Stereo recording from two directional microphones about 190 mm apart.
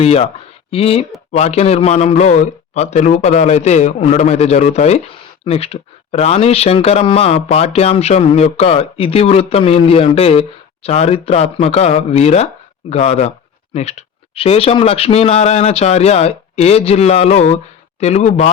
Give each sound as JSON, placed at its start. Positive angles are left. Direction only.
{"t": 0.0, "sound": "speech", "side_deg": 35}